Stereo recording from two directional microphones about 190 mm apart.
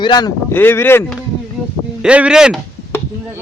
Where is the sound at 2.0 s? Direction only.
5° right (ahead or behind).